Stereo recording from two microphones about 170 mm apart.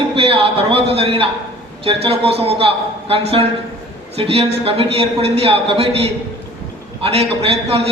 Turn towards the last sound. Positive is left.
turn(degrees=-35)  # may be behind; listen again after turning